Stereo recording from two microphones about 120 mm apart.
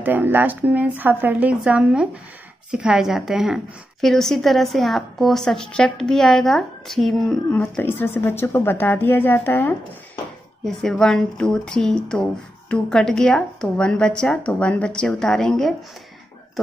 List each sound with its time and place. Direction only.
0.0 s speech: 15° right (ahead or behind); by 7.3 s centre (ahead or behind)
7.5 s speech: 15° left (ahead or behind)
10.6 s speech: 5° left (ahead or behind)